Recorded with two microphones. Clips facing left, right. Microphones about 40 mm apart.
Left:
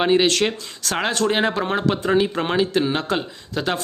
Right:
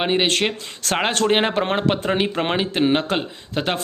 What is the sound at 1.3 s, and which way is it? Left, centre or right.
Speech, right.